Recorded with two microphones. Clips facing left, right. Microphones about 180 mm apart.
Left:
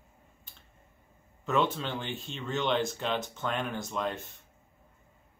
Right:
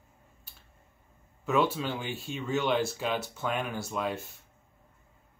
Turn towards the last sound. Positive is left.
turn(degrees=-5)  # may be behind; listen again after turning